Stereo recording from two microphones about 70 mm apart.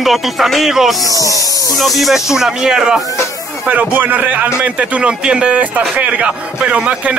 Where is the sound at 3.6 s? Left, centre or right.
Right.